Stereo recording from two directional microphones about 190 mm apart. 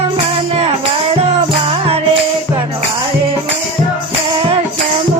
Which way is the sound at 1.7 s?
30° right (ahead or behind).